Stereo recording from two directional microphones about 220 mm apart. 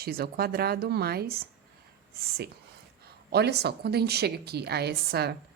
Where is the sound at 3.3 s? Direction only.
50° right (ahead or behind).